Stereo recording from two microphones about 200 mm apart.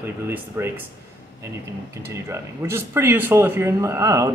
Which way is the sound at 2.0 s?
15° right (ahead or behind).